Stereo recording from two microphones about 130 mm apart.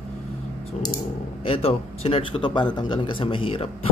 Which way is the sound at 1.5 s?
50° left (ahead or behind).